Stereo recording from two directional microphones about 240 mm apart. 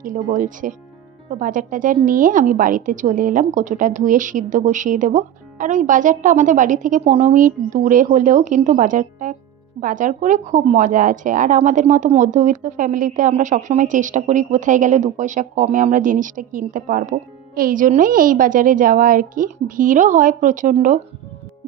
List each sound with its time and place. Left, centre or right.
0.0 s a woman's voice: right